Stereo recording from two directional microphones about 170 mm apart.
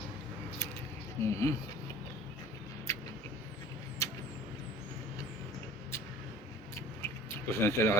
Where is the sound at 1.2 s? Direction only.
15° left (ahead or behind).